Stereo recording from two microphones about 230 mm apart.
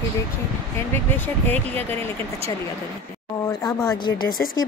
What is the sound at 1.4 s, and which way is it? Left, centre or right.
Speech, centre.